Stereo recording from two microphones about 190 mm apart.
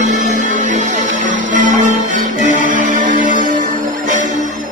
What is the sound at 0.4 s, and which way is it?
Music, 40° right (ahead or behind).